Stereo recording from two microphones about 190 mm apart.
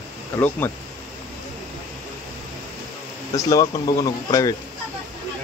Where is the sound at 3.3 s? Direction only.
20° left (ahead or behind).